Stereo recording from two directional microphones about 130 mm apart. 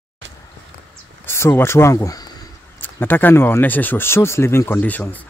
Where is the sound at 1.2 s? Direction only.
20° left (ahead or behind).